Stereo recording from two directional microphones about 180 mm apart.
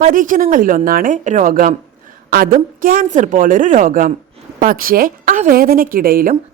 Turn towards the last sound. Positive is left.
turn(degrees=-55)  # may be behind; listen again after turning